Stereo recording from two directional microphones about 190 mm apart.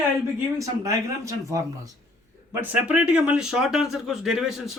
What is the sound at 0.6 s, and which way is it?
Speech, 15° right (ahead or behind).